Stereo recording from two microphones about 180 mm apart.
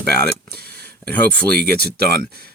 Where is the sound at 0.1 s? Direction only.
60° right (ahead or behind).